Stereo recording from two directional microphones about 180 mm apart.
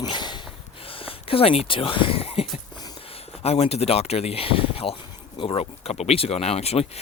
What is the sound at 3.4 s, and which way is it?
Speech, 35° left (ahead or behind).